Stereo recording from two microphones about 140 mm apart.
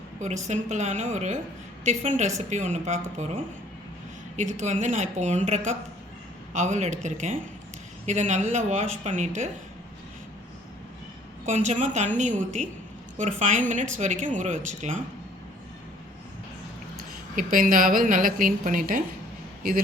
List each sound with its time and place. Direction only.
0.4 s speech: 55° right (ahead or behind)
11.4 s speech: 55° right (ahead or behind)
17.3 s a woman's voice: 80° right